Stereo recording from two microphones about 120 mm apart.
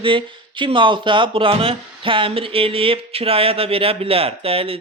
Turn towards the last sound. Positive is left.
turn(degrees=-50)  # may be behind; listen again after turning